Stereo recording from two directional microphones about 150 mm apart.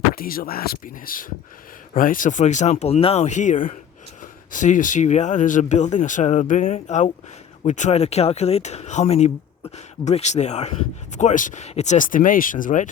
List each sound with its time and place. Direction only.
0.1 s speech: 75° left (ahead or behind); by 12.9 s 60° left (ahead or behind)